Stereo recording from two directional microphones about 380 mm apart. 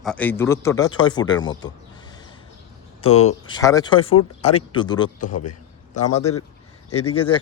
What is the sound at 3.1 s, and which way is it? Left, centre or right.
Speech, left.